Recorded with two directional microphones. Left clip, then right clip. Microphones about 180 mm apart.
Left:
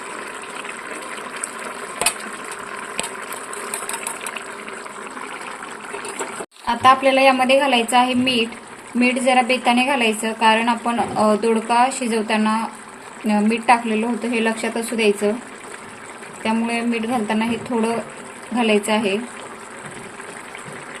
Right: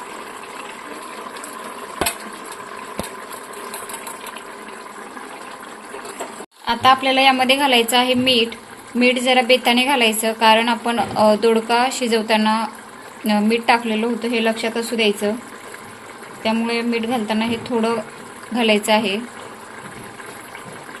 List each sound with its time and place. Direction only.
6.7 s a woman's voice: 10° left (ahead or behind)
16.4 s a woman's voice: 10° left (ahead or behind)